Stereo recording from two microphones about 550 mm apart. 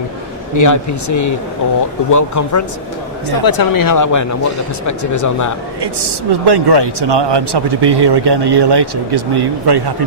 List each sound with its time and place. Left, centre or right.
0.5 s speech: left
5.8 s speech: right